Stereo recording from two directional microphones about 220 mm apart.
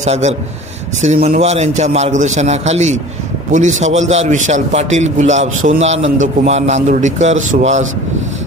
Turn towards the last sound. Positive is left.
turn(degrees=-35)  # may be behind; listen again after turning